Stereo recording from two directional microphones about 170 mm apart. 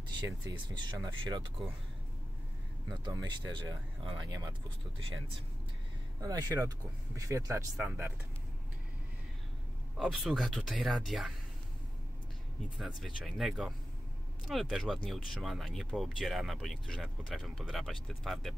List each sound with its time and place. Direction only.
0.2 s speech: 25° right (ahead or behind)
2.9 s speech: 25° right (ahead or behind)
6.2 s speech: 20° right (ahead or behind)
9.9 s speech: centre (ahead or behind)
12.7 s speech: centre (ahead or behind)